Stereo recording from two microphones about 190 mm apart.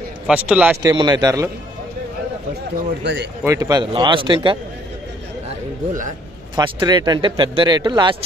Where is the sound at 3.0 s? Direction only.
70° right (ahead or behind).